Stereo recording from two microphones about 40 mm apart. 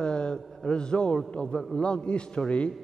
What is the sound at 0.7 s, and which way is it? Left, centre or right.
A man's voice, left.